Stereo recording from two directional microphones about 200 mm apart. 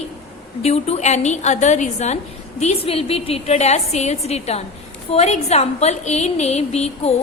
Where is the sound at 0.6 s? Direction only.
35° left (ahead or behind).